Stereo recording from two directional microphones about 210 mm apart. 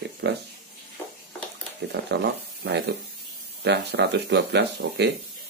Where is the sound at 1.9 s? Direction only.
50° right (ahead or behind).